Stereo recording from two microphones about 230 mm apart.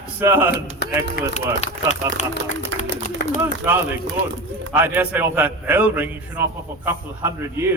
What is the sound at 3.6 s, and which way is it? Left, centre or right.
A man's voice, centre.